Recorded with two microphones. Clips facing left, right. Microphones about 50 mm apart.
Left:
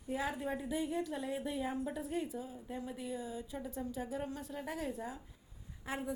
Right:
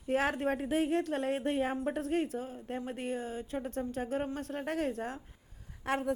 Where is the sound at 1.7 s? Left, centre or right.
Right.